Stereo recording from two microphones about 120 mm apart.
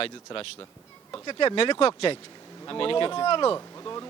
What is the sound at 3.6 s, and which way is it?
Speech, 25° left (ahead or behind).